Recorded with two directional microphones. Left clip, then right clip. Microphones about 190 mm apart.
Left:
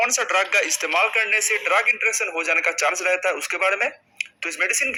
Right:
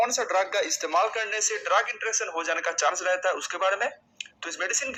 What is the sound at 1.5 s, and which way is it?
A man's voice, 35° left (ahead or behind).